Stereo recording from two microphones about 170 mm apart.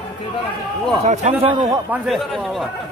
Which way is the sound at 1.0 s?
40° right (ahead or behind).